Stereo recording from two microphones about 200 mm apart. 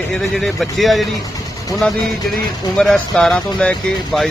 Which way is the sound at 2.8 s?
5° left (ahead or behind).